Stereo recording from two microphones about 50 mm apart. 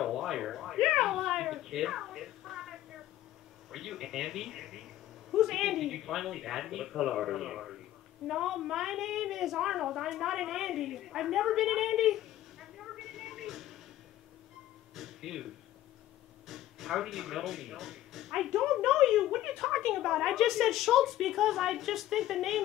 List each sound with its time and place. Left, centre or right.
0.0 s a sound: centre
3.7 s a woman's voice: centre
15.0 s music: centre
16.4 s speech: centre